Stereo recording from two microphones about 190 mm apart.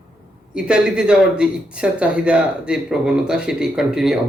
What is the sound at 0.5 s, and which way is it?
Speech, 5° right (ahead or behind).